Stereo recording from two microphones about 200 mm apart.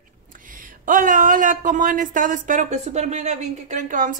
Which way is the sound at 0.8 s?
40° right (ahead or behind).